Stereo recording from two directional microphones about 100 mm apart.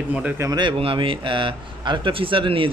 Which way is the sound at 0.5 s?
50° right (ahead or behind).